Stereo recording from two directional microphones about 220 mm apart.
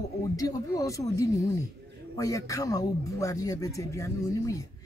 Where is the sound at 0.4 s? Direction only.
15° left (ahead or behind).